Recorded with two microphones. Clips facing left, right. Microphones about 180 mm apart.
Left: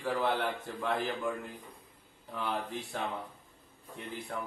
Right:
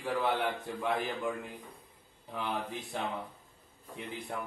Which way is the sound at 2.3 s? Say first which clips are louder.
Even; 15° right (ahead or behind).